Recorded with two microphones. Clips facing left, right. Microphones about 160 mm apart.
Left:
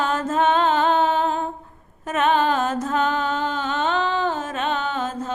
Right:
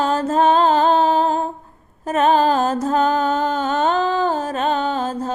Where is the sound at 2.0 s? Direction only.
35° right (ahead or behind).